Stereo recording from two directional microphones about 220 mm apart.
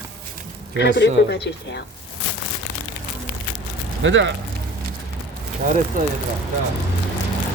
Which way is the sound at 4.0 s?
55° right (ahead or behind).